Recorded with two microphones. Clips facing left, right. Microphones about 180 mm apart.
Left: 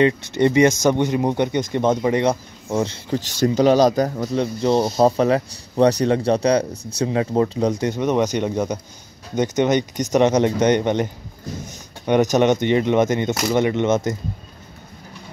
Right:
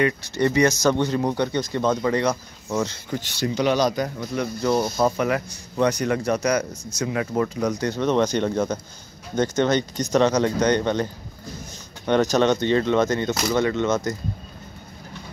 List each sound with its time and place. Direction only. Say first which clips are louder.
0.0 s speech: left 4 dB; 20° left (ahead or behind)
3.3 s speech: left 6 dB; 45° left (ahead or behind)
4.6 s speech: left 4 dB; 25° left (ahead or behind)
6.7 s speech: left 3 dB; 60° left (ahead or behind)
7.0 s speech: left 4 dB; 30° left (ahead or behind)
12.1 s speech: left 3 dB; 15° left (ahead or behind)